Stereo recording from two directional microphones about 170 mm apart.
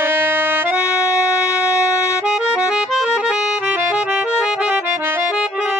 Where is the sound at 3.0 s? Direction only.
5° right (ahead or behind).